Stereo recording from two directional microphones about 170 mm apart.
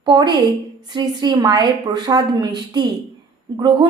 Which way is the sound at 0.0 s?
25° right (ahead or behind).